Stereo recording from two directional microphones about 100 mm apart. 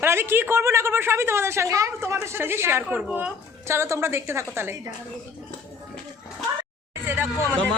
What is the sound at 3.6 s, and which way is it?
A woman's voice, 30° right (ahead or behind).